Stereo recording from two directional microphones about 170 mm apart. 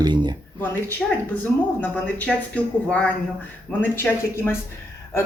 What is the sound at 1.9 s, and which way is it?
Speech, 5° left (ahead or behind).